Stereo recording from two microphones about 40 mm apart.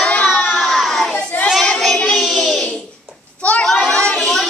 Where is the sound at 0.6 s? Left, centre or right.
Centre.